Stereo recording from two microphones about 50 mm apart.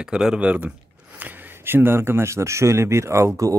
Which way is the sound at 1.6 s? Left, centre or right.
Right.